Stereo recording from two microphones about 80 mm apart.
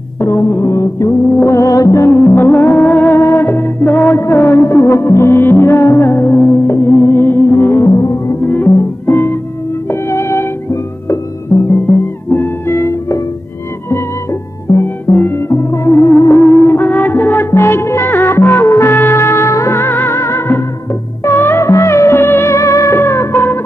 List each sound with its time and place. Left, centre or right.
0.2 s music: left
7.9 s music: left
8.5 s music: left
11.5 s music: left
12.3 s music: left
14.7 s music: left